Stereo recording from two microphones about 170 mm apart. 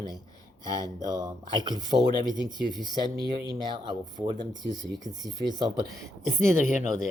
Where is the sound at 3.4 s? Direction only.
25° right (ahead or behind).